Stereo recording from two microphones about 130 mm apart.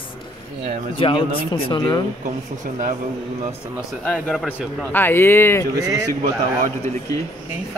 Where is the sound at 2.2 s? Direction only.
80° right.